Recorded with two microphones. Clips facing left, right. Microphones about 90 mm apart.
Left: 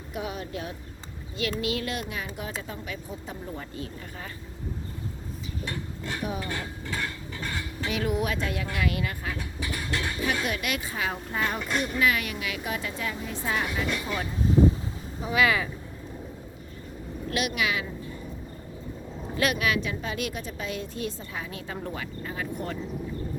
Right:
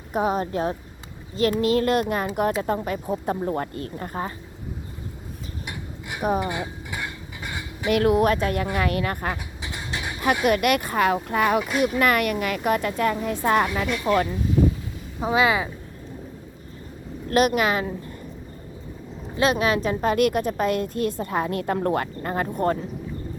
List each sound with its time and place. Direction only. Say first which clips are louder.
0.1 s a woman's voice: right 10 dB; 45° right (ahead or behind)
5.6 s a sound: left 2 dB; 15° right (ahead or behind)
6.4 s dishes: right 5 dB; 15° right (ahead or behind)
7.9 s a woman's voice: right 10 dB; 60° right (ahead or behind)
9.6 s vehicle: left 1 dB; 20° right (ahead or behind)
10.4 s a woman's voice: right 10 dB; 55° right (ahead or behind)
11.9 s a woman's voice: right 4 dB; 55° right (ahead or behind); by 14.3 s 80° right
15.2 s speech: right 4 dB; 25° right (ahead or behind)
17.3 s a woman's voice: right 9 dB; 45° right (ahead or behind)
19.4 s a woman's voice: right 5 dB; 30° right (ahead or behind)